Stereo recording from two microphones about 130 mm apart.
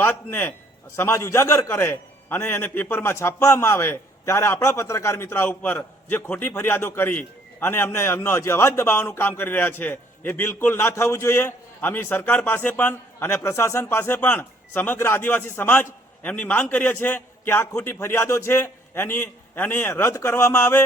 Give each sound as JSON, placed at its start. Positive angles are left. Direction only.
{"t": 0.0, "sound": "a man's voice", "side_deg": 15}